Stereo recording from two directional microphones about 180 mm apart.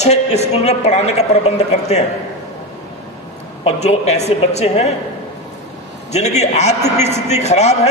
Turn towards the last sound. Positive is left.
turn(degrees=40)  # may be behind; listen again after turning